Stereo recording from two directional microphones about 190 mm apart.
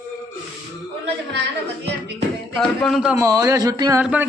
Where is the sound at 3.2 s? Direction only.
15° right (ahead or behind).